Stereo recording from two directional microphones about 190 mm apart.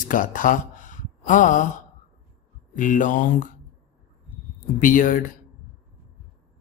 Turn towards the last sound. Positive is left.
turn(degrees=45)  # may be behind; listen again after turning